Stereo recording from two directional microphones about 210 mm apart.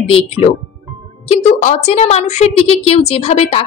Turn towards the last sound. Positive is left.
turn(degrees=30)  # may be behind; listen again after turning